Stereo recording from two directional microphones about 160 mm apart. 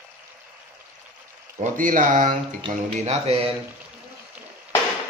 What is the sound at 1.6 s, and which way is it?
Speech, 55° right (ahead or behind).